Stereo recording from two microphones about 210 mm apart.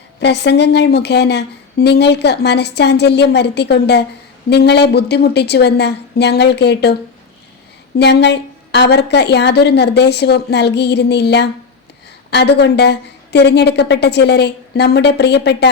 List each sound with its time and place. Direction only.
0.2 s a woman's voice: 55° left (ahead or behind)
7.9 s a woman's voice: 55° left (ahead or behind)